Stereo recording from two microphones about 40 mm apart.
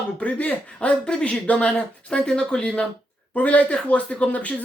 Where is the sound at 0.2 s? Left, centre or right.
Left.